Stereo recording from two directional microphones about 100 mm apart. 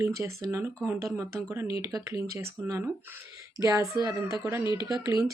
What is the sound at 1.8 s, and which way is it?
Speech, 35° right (ahead or behind).